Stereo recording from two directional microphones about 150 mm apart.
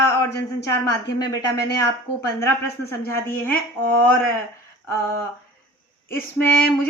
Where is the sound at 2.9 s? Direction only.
15° left (ahead or behind).